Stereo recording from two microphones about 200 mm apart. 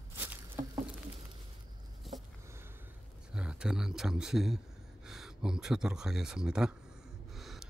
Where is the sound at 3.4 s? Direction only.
5° right (ahead or behind).